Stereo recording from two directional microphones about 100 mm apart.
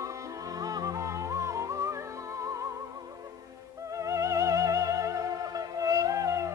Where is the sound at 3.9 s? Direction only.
30° right (ahead or behind).